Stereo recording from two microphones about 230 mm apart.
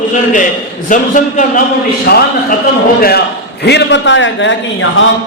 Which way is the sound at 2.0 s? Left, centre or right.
Left.